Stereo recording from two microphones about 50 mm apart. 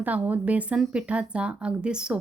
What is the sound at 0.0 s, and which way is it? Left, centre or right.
Speech, right.